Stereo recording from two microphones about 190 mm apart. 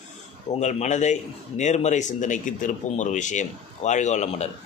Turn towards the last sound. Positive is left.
turn(degrees=35)  # may be behind; listen again after turning